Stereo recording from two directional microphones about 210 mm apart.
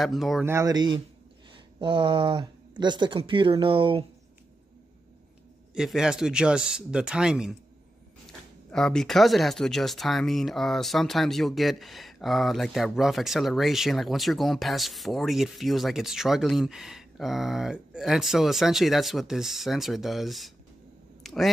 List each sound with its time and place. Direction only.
0.0 s speech: centre (ahead or behind)
0.5 s speech: 15° right (ahead or behind)
5.8 s speech: 5° right (ahead or behind)
21.2 s a sound: centre (ahead or behind)